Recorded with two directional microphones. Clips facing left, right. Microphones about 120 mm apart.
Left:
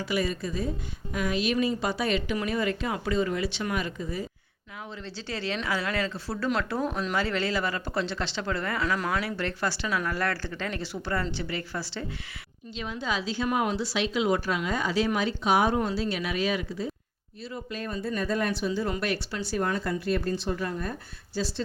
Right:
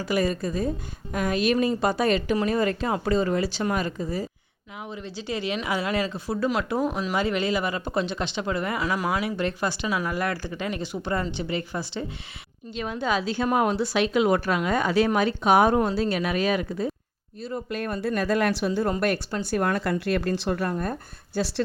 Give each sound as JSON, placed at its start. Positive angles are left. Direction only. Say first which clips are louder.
{"t": 0.0, "sound": "a woman's voice", "louder": "right 4 dB", "side_deg": -45}
{"t": 4.9, "sound": "speech", "louder": "right 5 dB", "side_deg": -15}
{"t": 12.7, "sound": "speech", "louder": "right 5 dB", "side_deg": -50}
{"t": 21.3, "sound": "speech", "louder": "right 4 dB", "side_deg": -65}